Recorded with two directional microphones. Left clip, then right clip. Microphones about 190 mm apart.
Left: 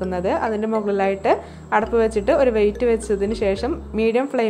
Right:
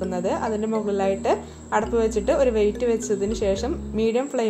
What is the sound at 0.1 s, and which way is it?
A woman's voice, 20° left (ahead or behind).